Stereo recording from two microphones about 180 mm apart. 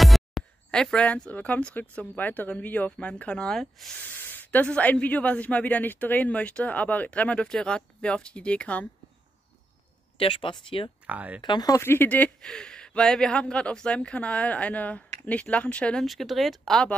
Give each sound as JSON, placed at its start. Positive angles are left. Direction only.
{"t": 0.0, "sound": "speech", "side_deg": 0}
{"t": 10.1, "sound": "speech", "side_deg": 30}
{"t": 11.1, "sound": "speech", "side_deg": -10}
{"t": 11.4, "sound": "speech", "side_deg": 20}